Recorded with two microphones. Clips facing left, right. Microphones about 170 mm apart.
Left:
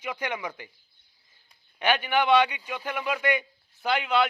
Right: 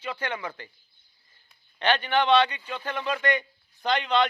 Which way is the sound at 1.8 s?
10° left (ahead or behind).